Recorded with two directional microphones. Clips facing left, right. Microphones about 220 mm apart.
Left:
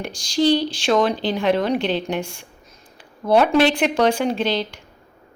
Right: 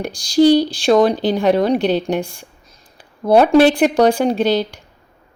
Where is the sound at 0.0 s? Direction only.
35° right (ahead or behind).